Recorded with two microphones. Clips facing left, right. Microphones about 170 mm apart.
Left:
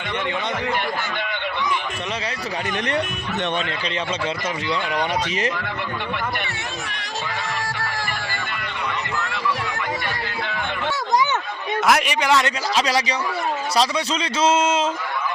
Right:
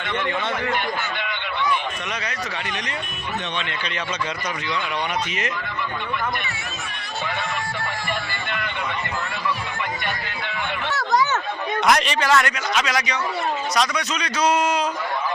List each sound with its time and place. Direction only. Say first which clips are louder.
11.9 s a man's voice: even; 10° left (ahead or behind)
12.7 s a man's voice: left 3 dB; 30° left (ahead or behind)